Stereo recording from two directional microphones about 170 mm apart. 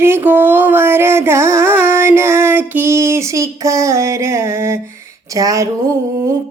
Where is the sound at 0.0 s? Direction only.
15° right (ahead or behind).